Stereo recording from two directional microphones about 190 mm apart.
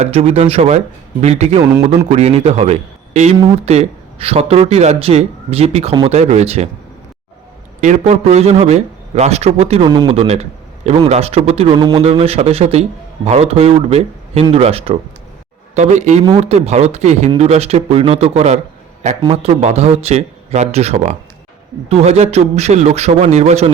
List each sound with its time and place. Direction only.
0.0 s a man's voice: 30° right (ahead or behind)
7.8 s a man's voice: 40° right (ahead or behind)